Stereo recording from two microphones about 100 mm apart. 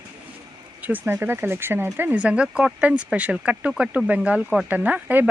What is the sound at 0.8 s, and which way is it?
Speech, 15° right (ahead or behind).